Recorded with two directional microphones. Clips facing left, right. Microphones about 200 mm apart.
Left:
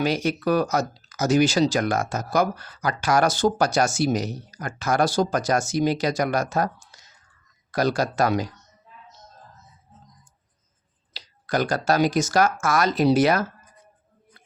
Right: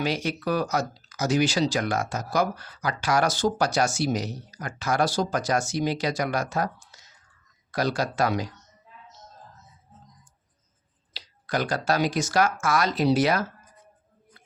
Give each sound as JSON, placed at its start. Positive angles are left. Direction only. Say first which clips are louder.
{"t": 0.0, "sound": "speech", "louder": "left 4 dB", "side_deg": 45}
{"t": 11.1, "sound": "speech", "louder": "left 3 dB", "side_deg": 45}